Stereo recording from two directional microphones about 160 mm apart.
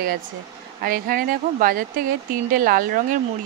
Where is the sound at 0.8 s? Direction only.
60° right (ahead or behind).